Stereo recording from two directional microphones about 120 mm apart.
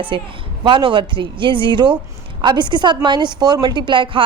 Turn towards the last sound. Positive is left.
turn(degrees=-45)  # may be behind; listen again after turning